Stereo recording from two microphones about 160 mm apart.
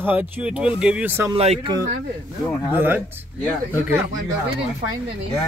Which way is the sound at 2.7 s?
10° right (ahead or behind).